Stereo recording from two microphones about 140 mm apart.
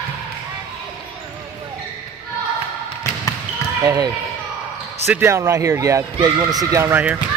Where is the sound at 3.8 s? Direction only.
20° right (ahead or behind).